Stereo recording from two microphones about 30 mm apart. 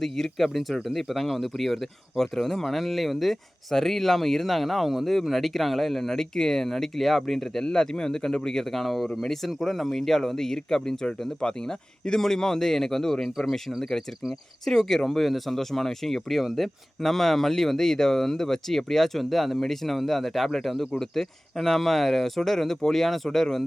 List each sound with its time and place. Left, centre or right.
0.0 s speech: centre
7.6 s speech: left; by 23.6 s centre